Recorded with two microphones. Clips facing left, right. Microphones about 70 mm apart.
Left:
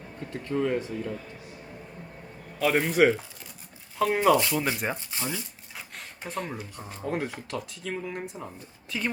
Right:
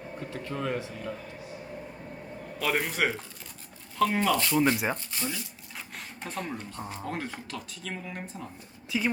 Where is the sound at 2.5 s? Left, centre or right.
Centre.